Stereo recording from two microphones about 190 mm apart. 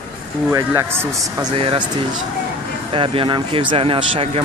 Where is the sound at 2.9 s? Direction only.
30° right (ahead or behind).